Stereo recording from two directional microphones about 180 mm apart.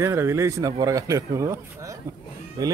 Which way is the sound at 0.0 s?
15° right (ahead or behind).